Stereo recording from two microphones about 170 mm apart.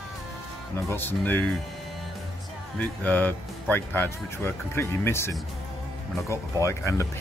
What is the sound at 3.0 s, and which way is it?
Speech, 10° left (ahead or behind).